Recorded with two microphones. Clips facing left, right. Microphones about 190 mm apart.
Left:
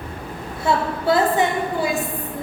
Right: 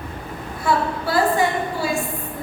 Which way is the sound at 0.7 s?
20° left (ahead or behind).